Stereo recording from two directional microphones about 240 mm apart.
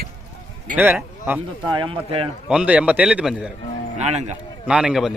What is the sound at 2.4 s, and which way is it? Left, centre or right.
Speech, centre.